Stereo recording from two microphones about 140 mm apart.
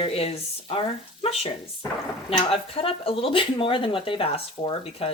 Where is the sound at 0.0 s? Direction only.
45° left (ahead or behind).